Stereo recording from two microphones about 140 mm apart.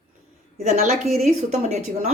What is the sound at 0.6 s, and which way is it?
A woman's voice, 55° right (ahead or behind).